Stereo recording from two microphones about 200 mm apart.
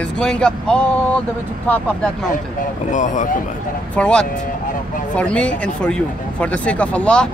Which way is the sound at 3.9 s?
5° left (ahead or behind).